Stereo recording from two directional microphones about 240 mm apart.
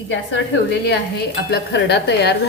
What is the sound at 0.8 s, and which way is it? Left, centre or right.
Stir, left.